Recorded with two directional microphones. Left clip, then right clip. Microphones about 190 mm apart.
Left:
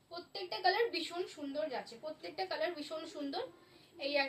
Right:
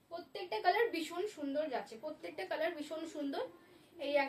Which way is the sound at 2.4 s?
15° right (ahead or behind).